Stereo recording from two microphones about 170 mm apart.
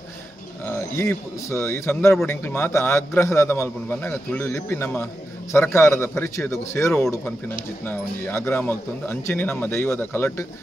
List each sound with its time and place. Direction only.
0.7 s a man's voice: 15° left (ahead or behind)